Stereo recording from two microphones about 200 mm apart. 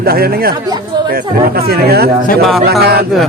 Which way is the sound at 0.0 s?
50° right (ahead or behind).